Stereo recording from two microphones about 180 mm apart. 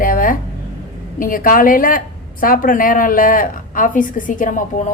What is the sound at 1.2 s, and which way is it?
Speech, 50° left (ahead or behind).